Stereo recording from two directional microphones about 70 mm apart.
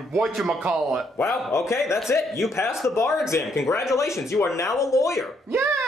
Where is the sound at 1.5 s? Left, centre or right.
Left.